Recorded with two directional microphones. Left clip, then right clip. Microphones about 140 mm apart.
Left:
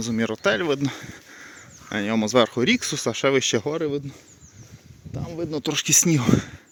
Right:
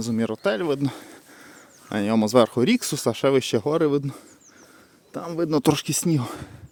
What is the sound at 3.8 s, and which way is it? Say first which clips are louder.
Speech: right 5 dB; 90° right.